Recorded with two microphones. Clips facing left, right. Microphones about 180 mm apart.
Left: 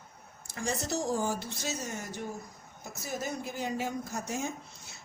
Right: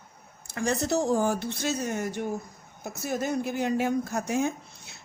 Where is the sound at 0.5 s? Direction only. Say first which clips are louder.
Right 7 dB; 65° right (ahead or behind).